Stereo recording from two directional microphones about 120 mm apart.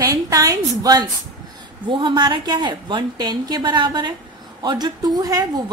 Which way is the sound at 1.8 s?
40° right (ahead or behind).